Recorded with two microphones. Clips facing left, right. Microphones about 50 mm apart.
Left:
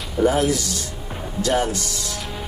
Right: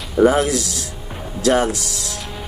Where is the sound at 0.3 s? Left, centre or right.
Right.